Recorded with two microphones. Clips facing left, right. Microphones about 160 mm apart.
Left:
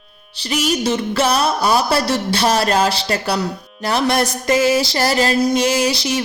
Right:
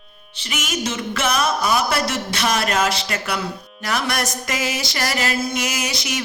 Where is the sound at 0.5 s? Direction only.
35° left (ahead or behind).